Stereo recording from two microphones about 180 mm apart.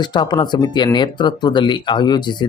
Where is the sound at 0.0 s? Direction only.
25° left (ahead or behind).